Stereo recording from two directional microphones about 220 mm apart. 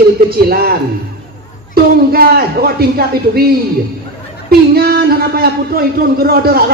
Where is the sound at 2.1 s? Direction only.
45° right (ahead or behind).